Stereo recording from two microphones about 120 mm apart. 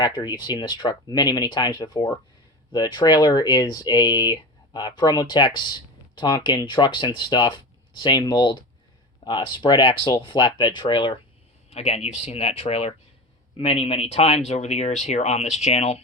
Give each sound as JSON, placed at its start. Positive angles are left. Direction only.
{"t": 0.0, "sound": "speech", "side_deg": 40}
{"t": 11.7, "sound": "speech", "side_deg": 65}